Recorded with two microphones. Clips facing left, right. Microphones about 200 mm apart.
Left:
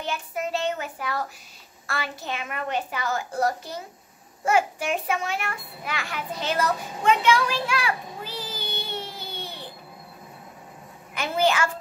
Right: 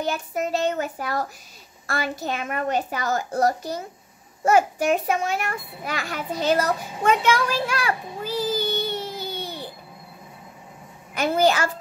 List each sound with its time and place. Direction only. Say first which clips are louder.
0.0 s a child's voice: right 4 dB; 40° right (ahead or behind)
11.1 s a child's voice: right 3 dB; 40° right (ahead or behind)